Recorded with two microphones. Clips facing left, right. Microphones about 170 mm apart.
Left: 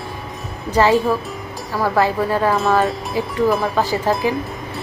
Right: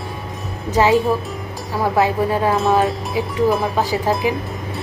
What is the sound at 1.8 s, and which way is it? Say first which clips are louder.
Speech: even; 15° right (ahead or behind).